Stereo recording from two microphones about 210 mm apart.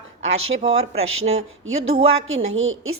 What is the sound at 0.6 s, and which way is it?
Speech, 30° right (ahead or behind).